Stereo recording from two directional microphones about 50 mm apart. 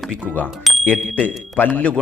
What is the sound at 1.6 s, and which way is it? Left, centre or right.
Speech, left.